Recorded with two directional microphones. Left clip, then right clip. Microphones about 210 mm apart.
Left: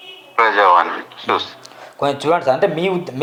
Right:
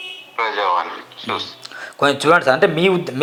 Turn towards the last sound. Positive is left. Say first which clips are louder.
# right 3 dB
turn(degrees=-30)  # may be behind; listen again after turning